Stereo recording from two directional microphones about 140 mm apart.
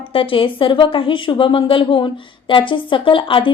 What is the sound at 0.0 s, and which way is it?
A woman's voice, 40° left (ahead or behind).